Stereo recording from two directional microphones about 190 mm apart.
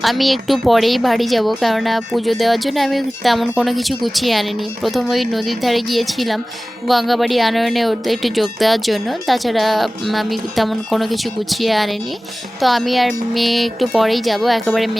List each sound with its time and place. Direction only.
0.0 s speech: centre (ahead or behind)